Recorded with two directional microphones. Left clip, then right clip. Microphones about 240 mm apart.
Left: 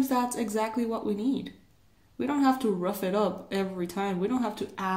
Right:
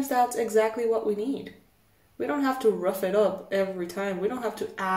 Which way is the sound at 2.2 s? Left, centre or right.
Left.